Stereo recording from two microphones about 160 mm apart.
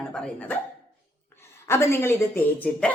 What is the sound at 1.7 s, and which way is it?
Speech, 15° left (ahead or behind).